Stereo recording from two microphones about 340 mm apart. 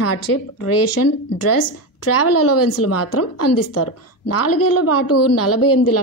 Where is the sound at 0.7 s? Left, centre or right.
Left.